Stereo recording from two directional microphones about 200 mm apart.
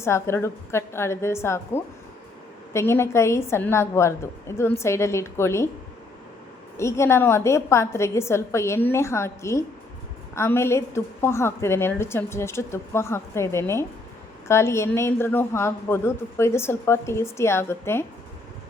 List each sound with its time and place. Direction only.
0.0 s a woman's voice: 15° left (ahead or behind)
6.7 s a woman's voice: 15° left (ahead or behind)